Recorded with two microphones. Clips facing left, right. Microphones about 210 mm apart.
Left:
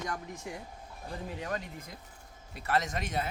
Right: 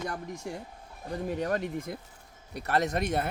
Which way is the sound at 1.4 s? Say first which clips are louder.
Right 8 dB; 50° right (ahead or behind).